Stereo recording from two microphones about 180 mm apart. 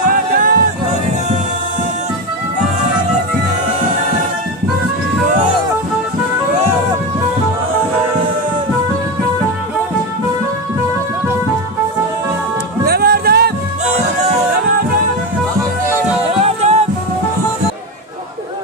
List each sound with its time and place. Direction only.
0.1 s music: 50° right (ahead or behind)
12.8 s music: 60° right (ahead or behind)
16.3 s music: 35° right (ahead or behind)